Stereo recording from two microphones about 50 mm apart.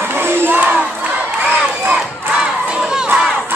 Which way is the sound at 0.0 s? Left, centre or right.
Right.